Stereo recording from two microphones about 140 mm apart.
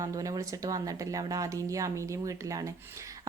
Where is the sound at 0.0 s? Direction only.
25° right (ahead or behind).